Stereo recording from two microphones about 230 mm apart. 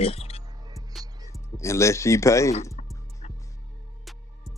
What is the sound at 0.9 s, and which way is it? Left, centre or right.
Music, centre.